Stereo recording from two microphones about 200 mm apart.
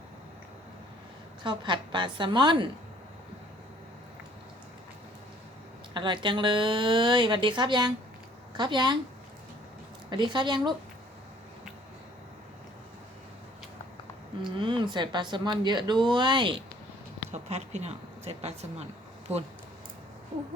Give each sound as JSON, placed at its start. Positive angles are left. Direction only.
{"t": 1.5, "sound": "speech", "side_deg": -25}
{"t": 5.9, "sound": "speech", "side_deg": -25}
{"t": 10.1, "sound": "speech", "side_deg": -25}
{"t": 14.6, "sound": "speech", "side_deg": -25}
{"t": 17.3, "sound": "a woman's voice", "side_deg": -35}